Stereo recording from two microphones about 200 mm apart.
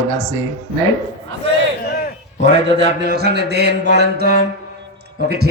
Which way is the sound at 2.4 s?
60° right (ahead or behind).